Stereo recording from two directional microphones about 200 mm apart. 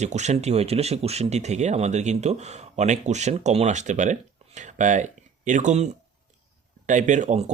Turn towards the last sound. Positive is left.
turn(degrees=-35)  # may be behind; listen again after turning